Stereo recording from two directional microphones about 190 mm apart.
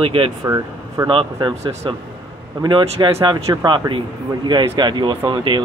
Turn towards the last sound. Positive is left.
turn(degrees=-25)  # may be behind; listen again after turning